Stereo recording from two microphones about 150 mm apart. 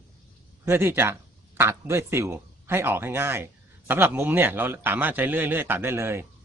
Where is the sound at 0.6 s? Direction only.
15° right (ahead or behind).